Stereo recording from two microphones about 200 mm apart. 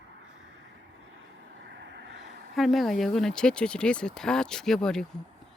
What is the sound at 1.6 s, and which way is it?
Vehicle, 60° right (ahead or behind).